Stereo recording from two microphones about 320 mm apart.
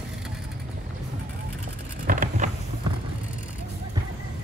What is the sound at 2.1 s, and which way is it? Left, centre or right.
Vehicle, right.